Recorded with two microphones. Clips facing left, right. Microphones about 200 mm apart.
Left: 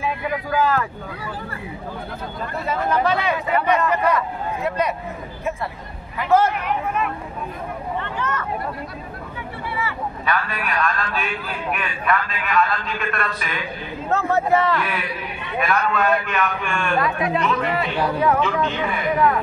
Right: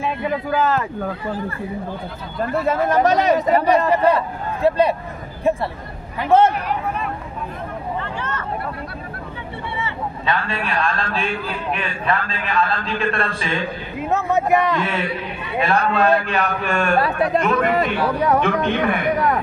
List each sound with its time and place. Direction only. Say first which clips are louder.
0.0 s speech: right 2 dB; 25° right (ahead or behind)
2.6 s a man's voice: right 3 dB; 45° right (ahead or behind); by 4.9 s 30° right (ahead or behind)
6.1 s a woman's voice: right 3 dB; 30° right (ahead or behind)
8.0 s vehicle: left 1 dB; 30° right (ahead or behind)
9.8 s a sound: left 1 dB; 25° right (ahead or behind)
11.7 s a man's voice: even; 30° right (ahead or behind)
14.0 s a man's voice: right 1 dB; 15° right (ahead or behind); by 18.4 s 40° right (ahead or behind)
18.4 s speech: right 3 dB; 55° right (ahead or behind)